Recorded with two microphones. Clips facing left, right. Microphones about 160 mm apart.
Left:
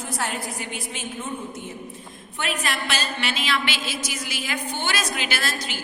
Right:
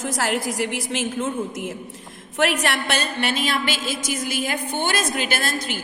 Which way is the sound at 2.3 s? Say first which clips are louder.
Right 7 dB; 80° right.